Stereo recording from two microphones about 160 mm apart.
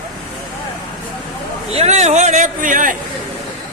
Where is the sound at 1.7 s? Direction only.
45° right (ahead or behind).